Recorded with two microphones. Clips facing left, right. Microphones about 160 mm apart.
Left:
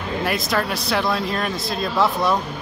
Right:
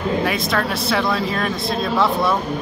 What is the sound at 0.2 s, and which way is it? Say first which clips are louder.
Speech: right 2 dB; centre (ahead or behind).